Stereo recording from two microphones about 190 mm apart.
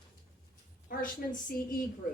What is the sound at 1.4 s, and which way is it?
Speech, 45° left (ahead or behind).